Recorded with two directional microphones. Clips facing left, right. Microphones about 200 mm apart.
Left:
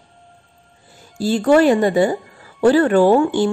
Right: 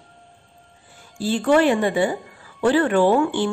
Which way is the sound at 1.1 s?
40° left (ahead or behind).